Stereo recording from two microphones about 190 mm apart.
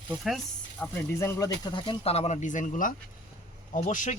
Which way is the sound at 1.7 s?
25° left (ahead or behind).